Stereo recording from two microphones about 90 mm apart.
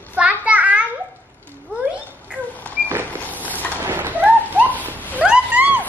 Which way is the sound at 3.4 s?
20° left (ahead or behind).